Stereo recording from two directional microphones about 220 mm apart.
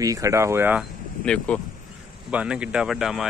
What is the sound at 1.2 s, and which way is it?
Speech, 5° left (ahead or behind).